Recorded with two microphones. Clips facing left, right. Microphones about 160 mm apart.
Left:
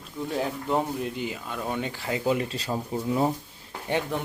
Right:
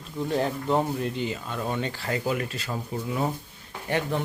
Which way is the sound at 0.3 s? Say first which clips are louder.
Right 2 dB; 5° left (ahead or behind).